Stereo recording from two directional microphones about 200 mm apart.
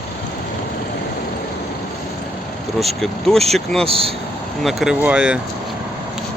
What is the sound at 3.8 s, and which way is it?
Speech, 30° right (ahead or behind).